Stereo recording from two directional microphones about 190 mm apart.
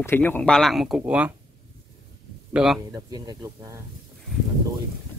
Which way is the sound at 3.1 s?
20° right (ahead or behind).